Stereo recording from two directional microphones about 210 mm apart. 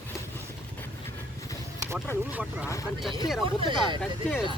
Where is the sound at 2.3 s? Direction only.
5° right (ahead or behind).